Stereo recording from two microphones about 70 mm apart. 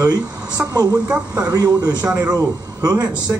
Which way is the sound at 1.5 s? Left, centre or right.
Right.